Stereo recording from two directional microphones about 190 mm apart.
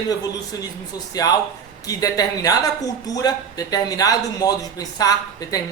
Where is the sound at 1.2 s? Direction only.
20° left (ahead or behind).